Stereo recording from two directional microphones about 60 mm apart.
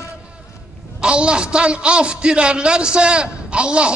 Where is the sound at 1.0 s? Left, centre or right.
Centre.